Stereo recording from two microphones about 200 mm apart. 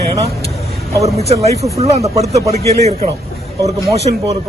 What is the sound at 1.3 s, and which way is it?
A man's voice, 30° right (ahead or behind).